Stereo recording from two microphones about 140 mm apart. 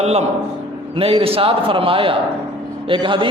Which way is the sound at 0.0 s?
50° right (ahead or behind).